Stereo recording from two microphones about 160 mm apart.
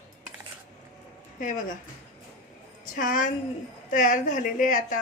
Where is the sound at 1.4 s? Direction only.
55° left (ahead or behind).